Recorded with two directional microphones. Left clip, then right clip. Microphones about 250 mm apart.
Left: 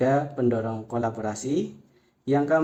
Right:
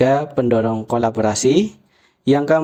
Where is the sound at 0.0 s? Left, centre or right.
Right.